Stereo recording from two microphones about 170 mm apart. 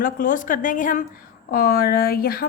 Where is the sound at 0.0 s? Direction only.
55° left (ahead or behind).